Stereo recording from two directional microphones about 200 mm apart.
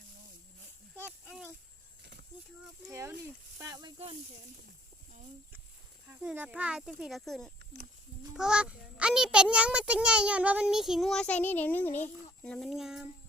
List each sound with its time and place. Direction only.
2.8 s speech: 10° right (ahead or behind); by 4.2 s 25° right (ahead or behind)
6.1 s a child's voice: 10° right (ahead or behind)